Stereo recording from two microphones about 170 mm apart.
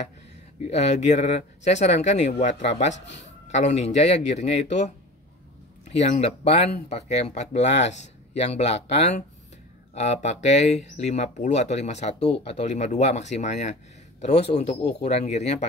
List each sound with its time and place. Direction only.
0.7 s speech: 40° left (ahead or behind)
15.0 s speech: 40° left (ahead or behind)